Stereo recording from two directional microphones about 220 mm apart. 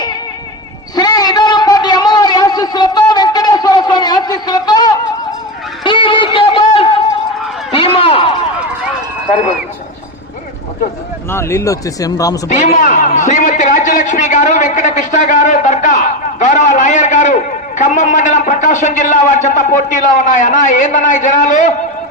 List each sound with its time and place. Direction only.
0.9 s a sound: 15° left (ahead or behind)
11.3 s speech: 10° left (ahead or behind)
12.5 s a man's voice: 35° left (ahead or behind)